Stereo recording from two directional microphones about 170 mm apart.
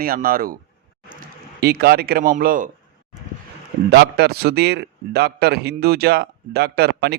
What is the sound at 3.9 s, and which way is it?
A man's voice, 75° right (ahead or behind).